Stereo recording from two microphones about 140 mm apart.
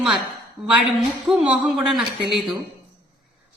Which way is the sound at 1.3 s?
5° right (ahead or behind).